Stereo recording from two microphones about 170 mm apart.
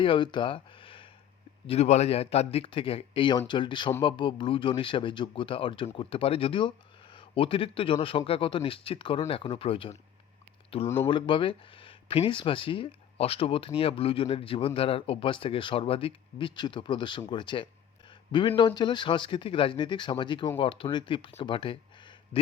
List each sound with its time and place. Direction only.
0.0 s speech: 30° left (ahead or behind)
10.9 s speech: 30° left (ahead or behind)